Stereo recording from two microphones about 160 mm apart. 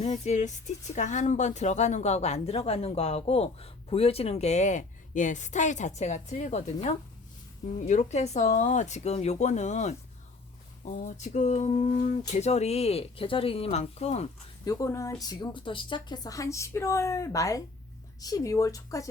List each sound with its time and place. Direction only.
0.0 s speech: 45° left (ahead or behind)
14.6 s a woman's voice: 20° left (ahead or behind)